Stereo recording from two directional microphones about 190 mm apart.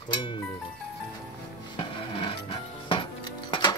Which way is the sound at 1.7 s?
25° left (ahead or behind).